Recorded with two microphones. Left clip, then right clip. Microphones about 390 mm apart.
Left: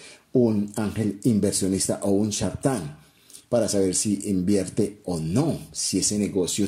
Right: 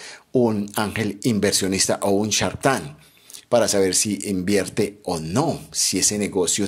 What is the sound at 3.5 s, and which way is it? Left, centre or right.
Speech, centre.